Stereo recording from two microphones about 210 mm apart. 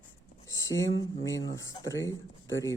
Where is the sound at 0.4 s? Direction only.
15° left (ahead or behind).